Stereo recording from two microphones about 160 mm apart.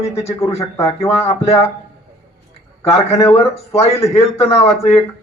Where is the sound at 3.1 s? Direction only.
15° left (ahead or behind).